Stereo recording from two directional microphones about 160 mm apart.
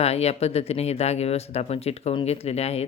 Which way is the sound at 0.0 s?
40° left (ahead or behind).